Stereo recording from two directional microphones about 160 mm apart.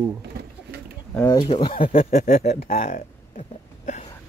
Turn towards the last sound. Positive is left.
turn(degrees=45)  # may be behind; listen again after turning